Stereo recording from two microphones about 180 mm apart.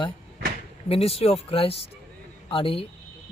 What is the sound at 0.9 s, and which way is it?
Speech, 30° left (ahead or behind).